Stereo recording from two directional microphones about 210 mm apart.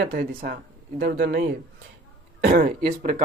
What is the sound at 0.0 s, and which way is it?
Speech, 45° right (ahead or behind).